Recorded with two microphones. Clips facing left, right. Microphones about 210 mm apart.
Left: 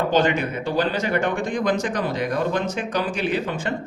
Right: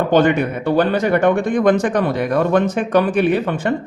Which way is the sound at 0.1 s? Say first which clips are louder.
Right 6 dB; 55° right (ahead or behind).